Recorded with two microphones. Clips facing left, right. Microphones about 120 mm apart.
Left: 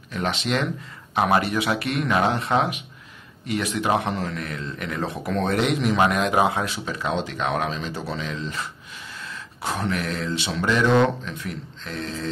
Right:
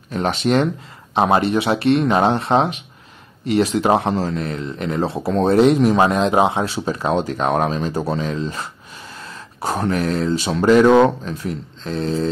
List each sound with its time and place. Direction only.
0.1 s a man's voice: 45° right (ahead or behind)
1.1 s a man's voice: 25° right (ahead or behind)